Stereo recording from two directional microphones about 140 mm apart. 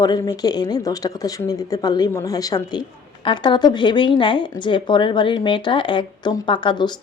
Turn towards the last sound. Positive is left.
turn(degrees=30)  # may be behind; listen again after turning